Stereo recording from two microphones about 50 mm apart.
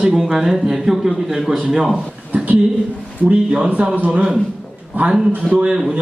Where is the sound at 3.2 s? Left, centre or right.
Right.